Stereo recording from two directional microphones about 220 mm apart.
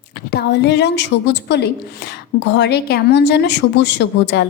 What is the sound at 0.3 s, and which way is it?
Speech, 50° left (ahead or behind).